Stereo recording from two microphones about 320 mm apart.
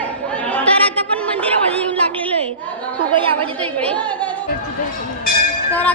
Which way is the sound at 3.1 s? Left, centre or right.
Centre.